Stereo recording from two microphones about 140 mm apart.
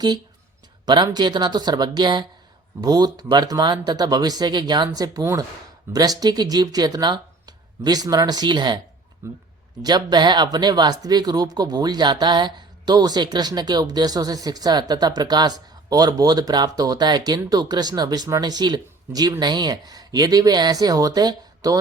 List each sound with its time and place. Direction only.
0.9 s speech: 30° right (ahead or behind)
9.2 s speech: 20° right (ahead or behind)
9.8 s speech: 30° right (ahead or behind)